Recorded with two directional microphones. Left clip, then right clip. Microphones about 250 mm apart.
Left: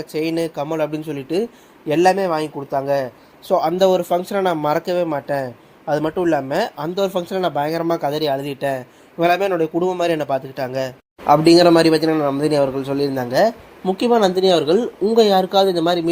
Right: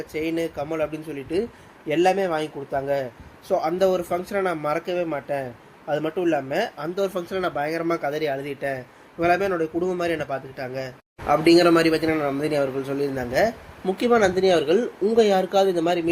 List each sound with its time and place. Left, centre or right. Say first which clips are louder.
0.1 s a man's voice: left 5 dB; left